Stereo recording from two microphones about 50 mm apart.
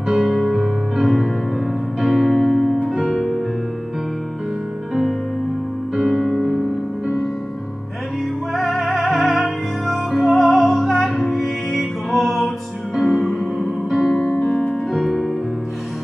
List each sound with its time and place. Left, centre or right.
0.1 s music: centre
5.9 s music: centre
8.5 s music: centre
13.6 s music: centre
14.5 s music: left
15.0 s music: centre